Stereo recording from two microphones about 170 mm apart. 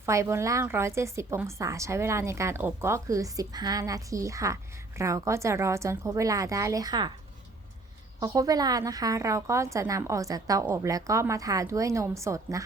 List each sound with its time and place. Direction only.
0.0 s a woman's voice: 15° right (ahead or behind)
8.2 s a woman's voice: 20° right (ahead or behind)